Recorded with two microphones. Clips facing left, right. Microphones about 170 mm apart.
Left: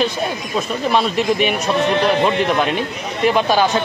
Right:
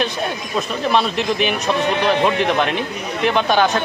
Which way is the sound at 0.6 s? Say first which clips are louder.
Even; centre (ahead or behind).